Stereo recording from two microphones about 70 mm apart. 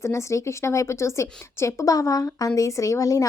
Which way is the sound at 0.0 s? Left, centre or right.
Left.